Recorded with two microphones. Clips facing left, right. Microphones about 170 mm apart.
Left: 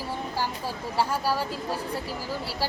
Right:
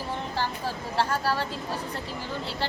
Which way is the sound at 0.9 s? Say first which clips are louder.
Left 1 dB; 10° left (ahead or behind).